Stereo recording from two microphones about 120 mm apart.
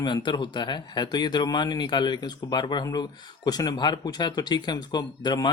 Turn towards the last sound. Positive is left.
turn(degrees=35)  # may be behind; listen again after turning